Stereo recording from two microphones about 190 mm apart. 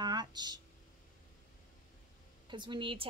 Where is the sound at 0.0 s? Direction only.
20° right (ahead or behind).